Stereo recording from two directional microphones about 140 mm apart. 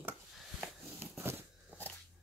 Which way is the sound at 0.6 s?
5° right (ahead or behind).